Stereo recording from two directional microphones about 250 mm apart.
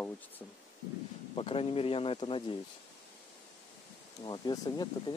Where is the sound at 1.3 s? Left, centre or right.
Left.